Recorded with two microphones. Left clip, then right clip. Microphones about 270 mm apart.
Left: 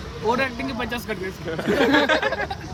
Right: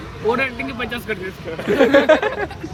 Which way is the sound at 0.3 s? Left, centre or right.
Left.